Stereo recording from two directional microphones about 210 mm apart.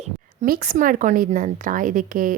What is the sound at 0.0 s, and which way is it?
Speech, 40° right (ahead or behind).